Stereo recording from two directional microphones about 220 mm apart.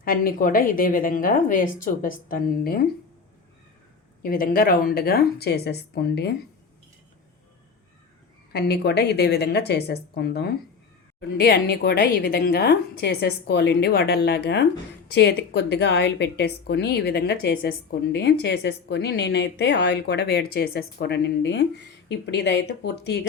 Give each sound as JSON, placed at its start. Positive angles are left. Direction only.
{"t": 0.0, "sound": "a woman's voice", "side_deg": 40}
{"t": 4.2, "sound": "a woman's voice", "side_deg": 40}
{"t": 8.5, "sound": "a woman's voice", "side_deg": 45}